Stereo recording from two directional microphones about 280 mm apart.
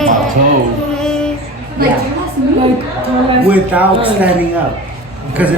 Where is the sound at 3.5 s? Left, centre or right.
Centre.